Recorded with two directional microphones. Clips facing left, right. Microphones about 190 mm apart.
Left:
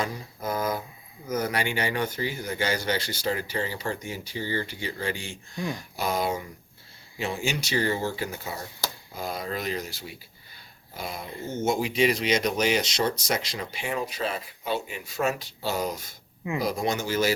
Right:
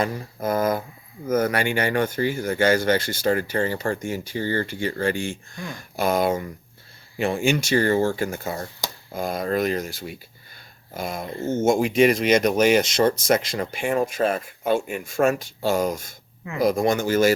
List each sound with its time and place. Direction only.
0.0 s speech: 55° right (ahead or behind)